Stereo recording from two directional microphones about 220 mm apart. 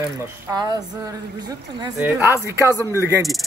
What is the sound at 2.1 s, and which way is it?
A man's voice, 10° right (ahead or behind).